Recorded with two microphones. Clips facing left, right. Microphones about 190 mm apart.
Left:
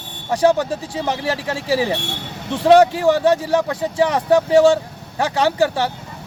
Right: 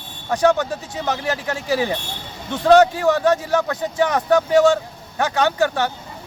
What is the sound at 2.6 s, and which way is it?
Speech, 10° left (ahead or behind).